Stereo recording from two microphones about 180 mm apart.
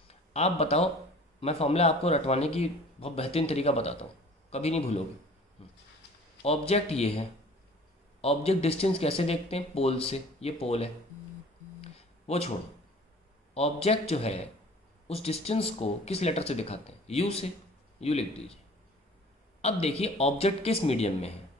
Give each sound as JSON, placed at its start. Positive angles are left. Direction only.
{"t": 0.1, "sound": "speech", "side_deg": 35}
{"t": 11.8, "sound": "a sound", "side_deg": 35}
{"t": 13.6, "sound": "speech", "side_deg": 35}
{"t": 19.6, "sound": "speech", "side_deg": 35}